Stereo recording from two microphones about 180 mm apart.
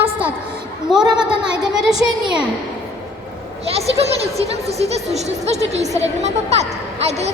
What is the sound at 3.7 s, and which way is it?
A woman's voice, 35° right (ahead or behind).